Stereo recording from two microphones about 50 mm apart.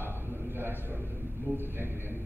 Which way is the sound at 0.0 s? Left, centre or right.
Right.